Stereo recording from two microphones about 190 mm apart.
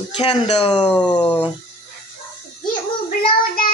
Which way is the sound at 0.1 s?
25° left (ahead or behind).